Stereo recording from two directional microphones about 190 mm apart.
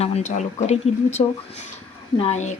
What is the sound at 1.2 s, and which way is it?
Speech, 30° left (ahead or behind).